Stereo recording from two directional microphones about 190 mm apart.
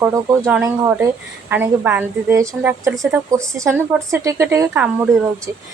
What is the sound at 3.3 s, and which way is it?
A woman's voice, 15° right (ahead or behind).